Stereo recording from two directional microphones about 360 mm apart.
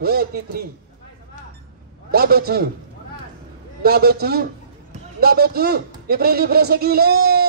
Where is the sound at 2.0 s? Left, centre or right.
Right.